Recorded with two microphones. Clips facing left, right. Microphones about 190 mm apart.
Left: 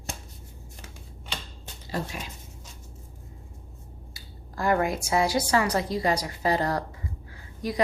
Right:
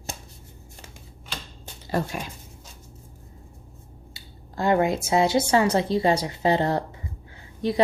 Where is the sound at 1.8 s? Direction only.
55° right (ahead or behind).